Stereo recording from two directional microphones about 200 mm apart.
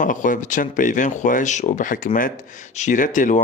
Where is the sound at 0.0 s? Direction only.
40° left (ahead or behind).